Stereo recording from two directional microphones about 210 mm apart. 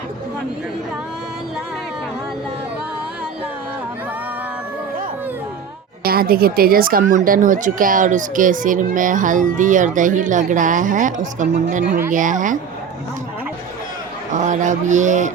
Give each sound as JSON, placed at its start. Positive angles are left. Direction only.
{"t": 6.0, "sound": "speech", "side_deg": -45}
{"t": 14.3, "sound": "speech", "side_deg": -35}